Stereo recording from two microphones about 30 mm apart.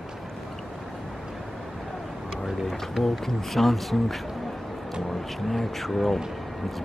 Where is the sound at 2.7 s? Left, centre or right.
Centre.